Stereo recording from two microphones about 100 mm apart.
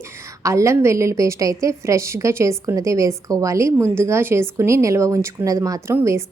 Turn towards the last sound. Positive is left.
turn(degrees=-25)  # may be behind; listen again after turning